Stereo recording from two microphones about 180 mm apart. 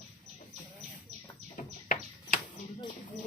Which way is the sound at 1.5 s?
45° left (ahead or behind).